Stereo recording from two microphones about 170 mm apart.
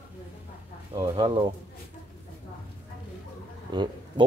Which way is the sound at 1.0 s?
30° right (ahead or behind).